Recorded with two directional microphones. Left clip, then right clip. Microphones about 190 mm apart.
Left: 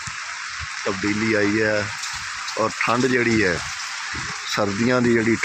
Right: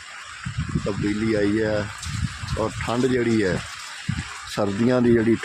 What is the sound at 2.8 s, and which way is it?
Speech, 10° right (ahead or behind).